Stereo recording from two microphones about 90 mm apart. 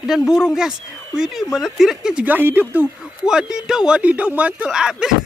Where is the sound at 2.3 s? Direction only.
20° right (ahead or behind).